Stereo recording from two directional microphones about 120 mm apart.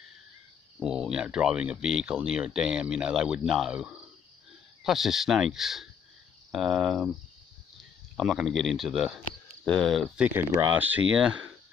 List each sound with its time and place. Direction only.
0.7 s speech: 5° right (ahead or behind)
8.2 s speech: centre (ahead or behind)